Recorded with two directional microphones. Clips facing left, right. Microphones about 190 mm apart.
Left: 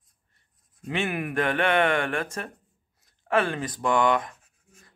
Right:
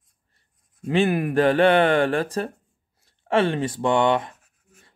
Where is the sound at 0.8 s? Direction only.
35° right (ahead or behind).